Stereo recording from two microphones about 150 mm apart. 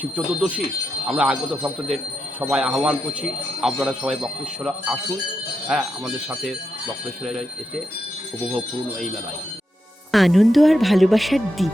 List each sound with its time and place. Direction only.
0.0 s speech: 10° right (ahead or behind)
10.1 s speech: centre (ahead or behind)